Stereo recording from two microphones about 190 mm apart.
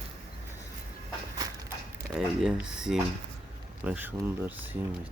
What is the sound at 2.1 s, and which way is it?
Speech, 5° right (ahead or behind).